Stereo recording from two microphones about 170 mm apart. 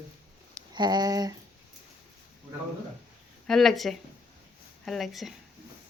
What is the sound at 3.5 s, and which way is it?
A woman's voice, centre (ahead or behind).